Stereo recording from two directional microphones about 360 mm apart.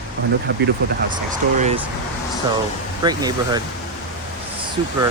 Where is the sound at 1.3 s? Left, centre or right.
Centre.